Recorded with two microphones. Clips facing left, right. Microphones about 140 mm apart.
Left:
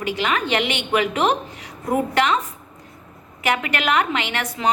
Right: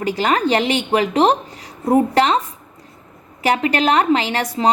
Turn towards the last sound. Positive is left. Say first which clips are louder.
# right 5 dB
turn(degrees=-35)  # may be behind; listen again after turning